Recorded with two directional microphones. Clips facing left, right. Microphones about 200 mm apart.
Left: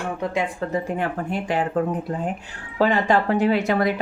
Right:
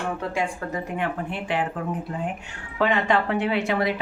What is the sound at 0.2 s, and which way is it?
Speech, 20° left (ahead or behind).